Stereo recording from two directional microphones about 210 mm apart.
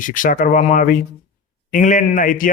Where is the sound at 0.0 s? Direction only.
40° left (ahead or behind).